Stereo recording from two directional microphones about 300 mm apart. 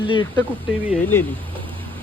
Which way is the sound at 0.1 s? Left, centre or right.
Centre.